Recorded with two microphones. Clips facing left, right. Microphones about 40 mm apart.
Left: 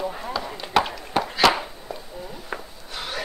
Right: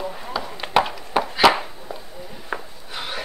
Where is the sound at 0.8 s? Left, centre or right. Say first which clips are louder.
Right 2 dB; centre.